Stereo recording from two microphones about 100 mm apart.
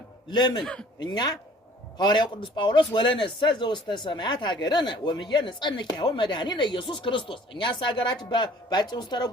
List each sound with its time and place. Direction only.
0.3 s a man's voice: 45° left (ahead or behind)
0.6 s a man's voice: 10° left (ahead or behind)
1.0 s a man's voice: 40° left (ahead or behind)